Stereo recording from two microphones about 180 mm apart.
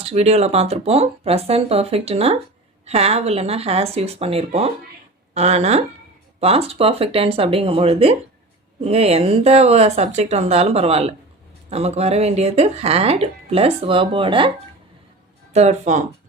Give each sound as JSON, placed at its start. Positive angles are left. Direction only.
{"t": 0.0, "sound": "speech", "side_deg": -35}
{"t": 15.5, "sound": "speech", "side_deg": -40}